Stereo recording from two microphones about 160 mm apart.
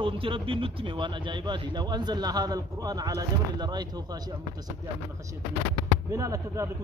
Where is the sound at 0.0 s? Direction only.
35° right (ahead or behind).